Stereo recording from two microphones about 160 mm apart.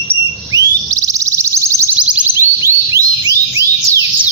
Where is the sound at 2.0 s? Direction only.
10° right (ahead or behind).